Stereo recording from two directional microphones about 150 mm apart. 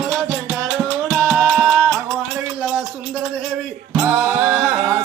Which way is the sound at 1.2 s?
Centre (ahead or behind).